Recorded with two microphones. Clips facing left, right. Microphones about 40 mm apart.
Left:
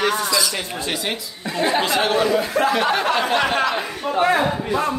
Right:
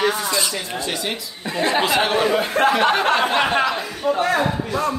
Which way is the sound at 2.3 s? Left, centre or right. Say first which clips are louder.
Right 1 dB; right.